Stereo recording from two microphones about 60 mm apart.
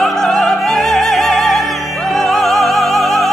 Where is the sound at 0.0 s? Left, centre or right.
Centre.